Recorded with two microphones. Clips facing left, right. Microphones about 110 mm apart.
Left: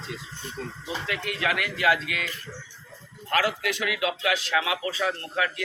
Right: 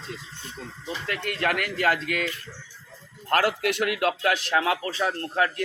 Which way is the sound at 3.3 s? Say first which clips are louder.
Right 3 dB; 50° right (ahead or behind).